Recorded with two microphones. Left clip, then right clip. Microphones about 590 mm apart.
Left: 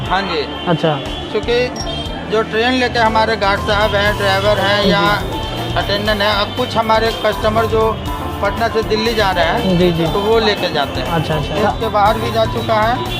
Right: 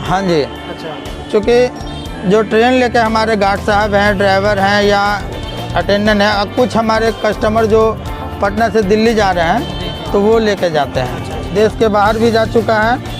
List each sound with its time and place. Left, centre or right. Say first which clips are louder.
0.1 s speech: right 3 dB; right
1.5 s speech: right 4 dB; right
11.9 s speech: right 1 dB; right